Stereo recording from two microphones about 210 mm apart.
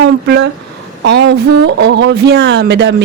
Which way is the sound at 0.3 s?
55° right (ahead or behind).